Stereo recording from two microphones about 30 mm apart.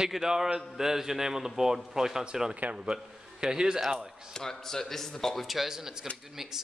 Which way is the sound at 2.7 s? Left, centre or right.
Right.